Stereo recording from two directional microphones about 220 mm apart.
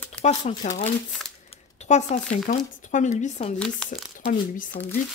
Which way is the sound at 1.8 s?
30° left (ahead or behind).